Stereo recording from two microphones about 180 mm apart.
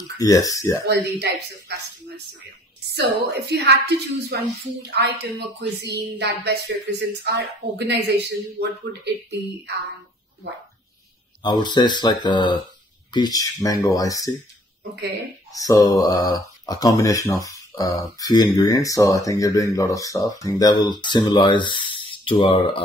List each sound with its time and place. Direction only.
0.2 s speech: 20° left (ahead or behind)
0.8 s a woman's voice: 65° right (ahead or behind)
2.9 s a woman's voice: 65° right (ahead or behind)
11.4 s speech: 25° left (ahead or behind)
14.8 s speech: 60° right (ahead or behind)
15.5 s speech: 20° left (ahead or behind)